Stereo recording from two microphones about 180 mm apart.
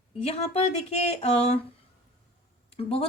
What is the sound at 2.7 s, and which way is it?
Speech, 30° left (ahead or behind).